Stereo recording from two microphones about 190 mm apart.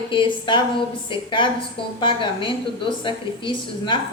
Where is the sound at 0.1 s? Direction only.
25° left (ahead or behind).